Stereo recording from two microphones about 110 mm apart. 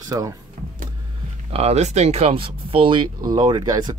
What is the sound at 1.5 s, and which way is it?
Speech, 65° right (ahead or behind).